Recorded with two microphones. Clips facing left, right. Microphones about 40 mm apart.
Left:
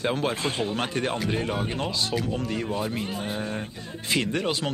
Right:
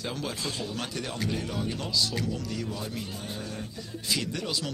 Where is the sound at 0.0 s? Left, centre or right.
Left.